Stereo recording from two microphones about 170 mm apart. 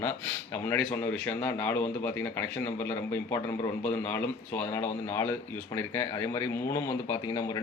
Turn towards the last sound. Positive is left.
turn(degrees=20)  # may be behind; listen again after turning